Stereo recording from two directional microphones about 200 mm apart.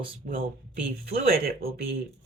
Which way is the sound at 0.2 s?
45° right (ahead or behind).